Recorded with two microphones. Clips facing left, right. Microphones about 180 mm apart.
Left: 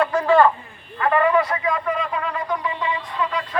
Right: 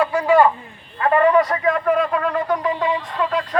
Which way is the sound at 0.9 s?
35° right (ahead or behind).